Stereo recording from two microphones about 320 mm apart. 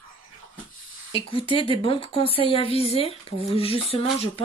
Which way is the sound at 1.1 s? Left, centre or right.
Centre.